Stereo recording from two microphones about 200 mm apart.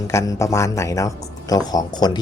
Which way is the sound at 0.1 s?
15° left (ahead or behind).